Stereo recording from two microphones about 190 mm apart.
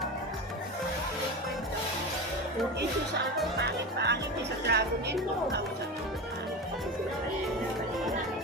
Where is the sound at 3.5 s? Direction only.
60° right (ahead or behind).